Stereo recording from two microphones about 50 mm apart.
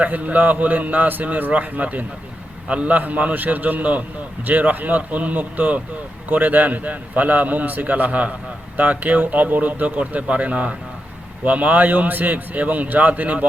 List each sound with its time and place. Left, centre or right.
0.0 s a man's voice: right